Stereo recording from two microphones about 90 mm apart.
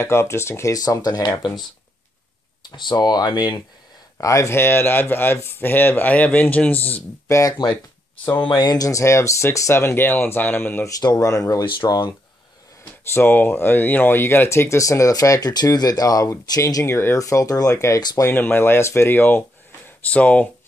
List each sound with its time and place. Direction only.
0.0 s speech: 30° left (ahead or behind)
0.7 s speech: 45° left (ahead or behind)
2.7 s speech: 55° left (ahead or behind)
4.2 s speech: 35° left (ahead or behind); by 7.0 s 20° left (ahead or behind)
7.2 s speech: 35° left (ahead or behind)
8.4 s speech: 50° left (ahead or behind); by 10.9 s 25° left (ahead or behind)
10.9 s speech: 45° left (ahead or behind)
11.8 s speech: 50° left (ahead or behind)
13.1 s speech: 25° left (ahead or behind)
18.3 s speech: 20° left (ahead or behind)